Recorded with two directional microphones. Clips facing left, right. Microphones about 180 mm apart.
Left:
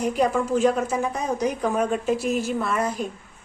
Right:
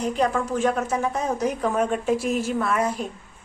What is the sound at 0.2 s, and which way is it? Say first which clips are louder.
A woman's voice: left 3 dB; centre (ahead or behind).